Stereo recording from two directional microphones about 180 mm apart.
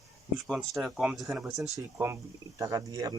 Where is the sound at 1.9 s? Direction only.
15° right (ahead or behind).